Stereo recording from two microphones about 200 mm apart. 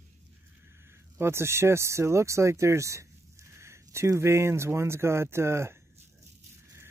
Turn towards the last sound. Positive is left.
turn(degrees=-15)  # may be behind; listen again after turning